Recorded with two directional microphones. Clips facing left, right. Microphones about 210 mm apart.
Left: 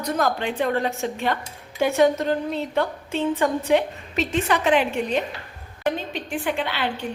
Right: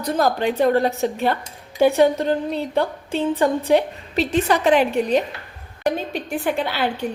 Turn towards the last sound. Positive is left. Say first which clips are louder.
# right 3 dB
turn(degrees=-40)  # may be behind; listen again after turning